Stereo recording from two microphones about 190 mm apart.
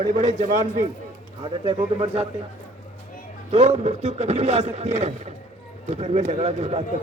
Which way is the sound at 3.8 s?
35° right (ahead or behind).